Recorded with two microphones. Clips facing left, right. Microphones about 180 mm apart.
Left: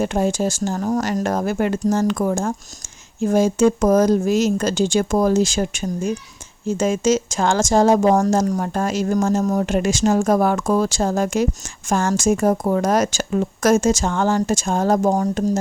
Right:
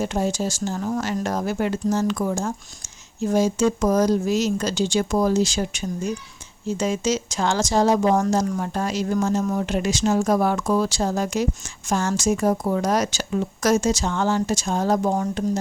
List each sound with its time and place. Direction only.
0.0 s speech: 55° left (ahead or behind); by 15.5 s 35° left (ahead or behind)